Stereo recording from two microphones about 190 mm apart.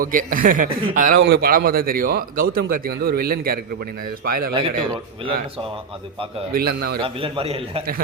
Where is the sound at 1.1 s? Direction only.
60° right (ahead or behind).